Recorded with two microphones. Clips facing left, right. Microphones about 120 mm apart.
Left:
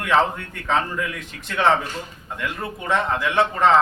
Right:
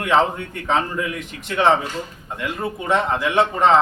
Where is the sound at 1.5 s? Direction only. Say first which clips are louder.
Right 2 dB; 20° right (ahead or behind).